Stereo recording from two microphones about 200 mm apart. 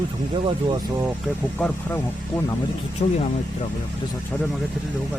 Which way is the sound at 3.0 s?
30° left (ahead or behind).